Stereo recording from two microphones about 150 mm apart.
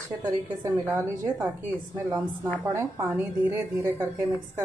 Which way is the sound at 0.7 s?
20° right (ahead or behind).